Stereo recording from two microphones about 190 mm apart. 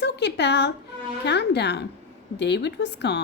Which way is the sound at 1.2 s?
60° left (ahead or behind).